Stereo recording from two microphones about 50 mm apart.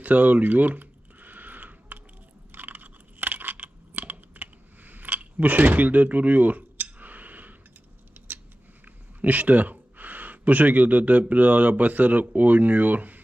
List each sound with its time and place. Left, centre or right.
0.0 s a sound: right
8.3 s scissors: right
8.8 s speech: right